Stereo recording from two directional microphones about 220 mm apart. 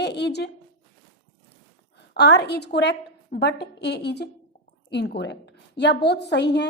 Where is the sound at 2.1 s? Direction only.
50° left (ahead or behind).